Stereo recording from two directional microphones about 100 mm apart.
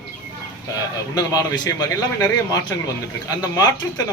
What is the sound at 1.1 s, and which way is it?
A man's voice, 40° left (ahead or behind).